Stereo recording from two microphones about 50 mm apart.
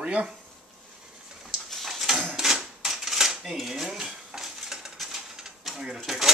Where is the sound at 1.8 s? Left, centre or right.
Centre.